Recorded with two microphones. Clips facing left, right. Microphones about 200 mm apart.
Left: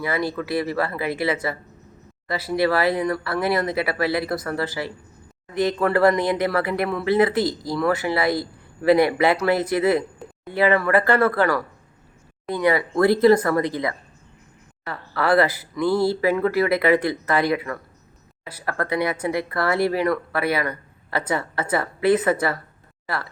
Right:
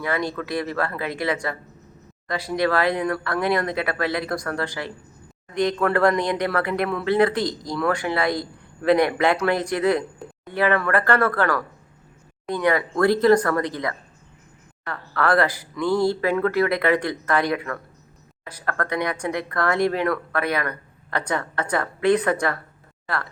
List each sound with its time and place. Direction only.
0.0 s speech: 5° left (ahead or behind)